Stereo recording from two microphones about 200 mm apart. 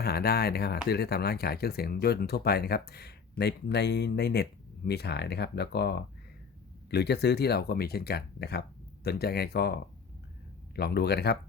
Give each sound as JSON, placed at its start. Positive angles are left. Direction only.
{"t": 0.0, "sound": "speech", "side_deg": 50}